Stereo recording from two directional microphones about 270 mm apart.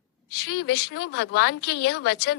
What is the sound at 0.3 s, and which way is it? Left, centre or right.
A woman's voice, left.